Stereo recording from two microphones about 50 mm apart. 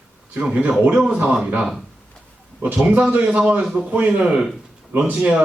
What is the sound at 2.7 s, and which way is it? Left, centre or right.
Speech, right.